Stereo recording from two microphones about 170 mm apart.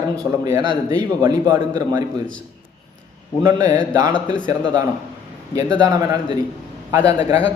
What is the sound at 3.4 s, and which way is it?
Speech, 20° right (ahead or behind).